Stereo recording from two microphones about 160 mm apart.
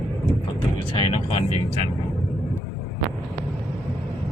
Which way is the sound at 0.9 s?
35° left (ahead or behind).